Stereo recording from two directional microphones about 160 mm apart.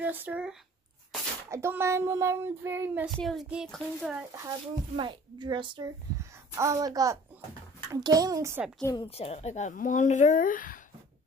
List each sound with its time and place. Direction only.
0.0 s speech: 10° right (ahead or behind)
3.2 s a child's voice: centre (ahead or behind)
4.5 s a woman's voice: 30° right (ahead or behind)
8.8 s a woman's voice: 25° left (ahead or behind)
9.1 s speech: 40° left (ahead or behind); by 10.8 s 60° left (ahead or behind)